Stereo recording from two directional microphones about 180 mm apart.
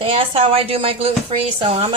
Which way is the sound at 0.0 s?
30° right (ahead or behind).